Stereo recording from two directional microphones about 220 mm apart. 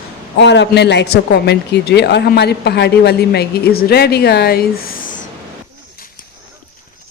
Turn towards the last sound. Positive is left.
turn(degrees=40)  # may be behind; listen again after turning